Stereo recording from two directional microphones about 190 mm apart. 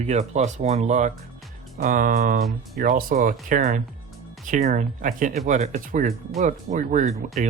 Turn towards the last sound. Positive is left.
turn(degrees=-40)  # may be behind; listen again after turning